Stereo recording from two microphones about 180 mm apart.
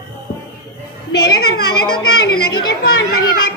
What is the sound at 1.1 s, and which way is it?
Child singing, 65° left (ahead or behind).